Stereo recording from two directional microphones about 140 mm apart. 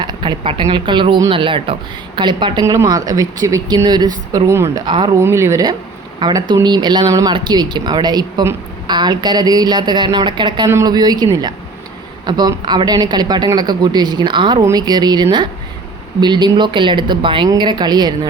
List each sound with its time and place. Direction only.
0.0 s speech: 35° right (ahead or behind)
4.9 s speech: 35° right (ahead or behind)
5.2 s speech: 20° right (ahead or behind)